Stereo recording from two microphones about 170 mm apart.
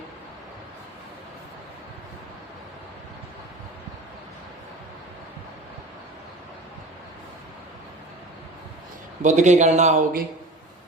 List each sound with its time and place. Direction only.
9.2 s a man's voice: 45° right (ahead or behind)